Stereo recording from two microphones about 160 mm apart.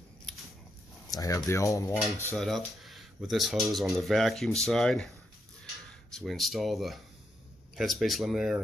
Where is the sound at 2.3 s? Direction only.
Centre (ahead or behind).